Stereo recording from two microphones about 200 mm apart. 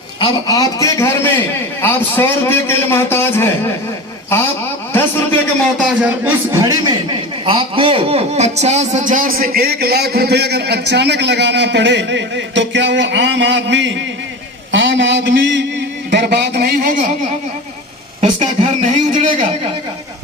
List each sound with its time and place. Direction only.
0.2 s a man's voice: 20° left (ahead or behind)
4.9 s a man's voice: 10° left (ahead or behind)
5.7 s a man's voice: 5° right (ahead or behind); by 17.0 s 45° right (ahead or behind)
18.2 s speech: 35° right (ahead or behind)